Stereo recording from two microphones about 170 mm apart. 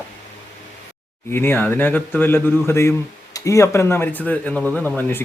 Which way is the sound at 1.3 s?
15° left (ahead or behind).